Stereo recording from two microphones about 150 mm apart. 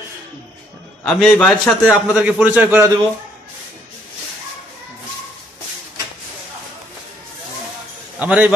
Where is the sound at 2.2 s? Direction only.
10° right (ahead or behind).